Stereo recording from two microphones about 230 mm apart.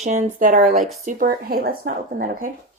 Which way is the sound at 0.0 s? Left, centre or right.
Right.